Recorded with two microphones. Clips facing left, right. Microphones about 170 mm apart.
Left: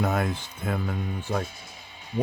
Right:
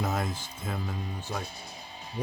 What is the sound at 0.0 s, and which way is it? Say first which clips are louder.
Speech: left 5 dB; 65° left (ahead or behind).